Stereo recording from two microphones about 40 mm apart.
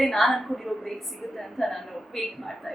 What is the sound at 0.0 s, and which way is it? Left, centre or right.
A woman's voice, centre.